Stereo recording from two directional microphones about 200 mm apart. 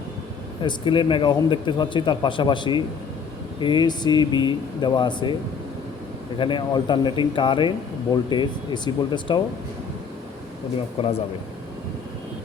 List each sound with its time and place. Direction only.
0.6 s a man's voice: 25° left (ahead or behind)
6.4 s a man's voice: 25° left (ahead or behind)
11.0 s a man's voice: 30° left (ahead or behind)